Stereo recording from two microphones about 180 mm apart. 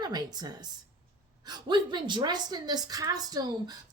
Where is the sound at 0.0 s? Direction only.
25° right (ahead or behind).